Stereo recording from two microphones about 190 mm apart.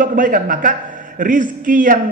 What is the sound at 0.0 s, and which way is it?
A man's voice, 45° right (ahead or behind).